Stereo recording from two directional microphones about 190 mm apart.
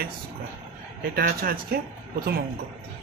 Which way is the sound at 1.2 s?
50° right (ahead or behind).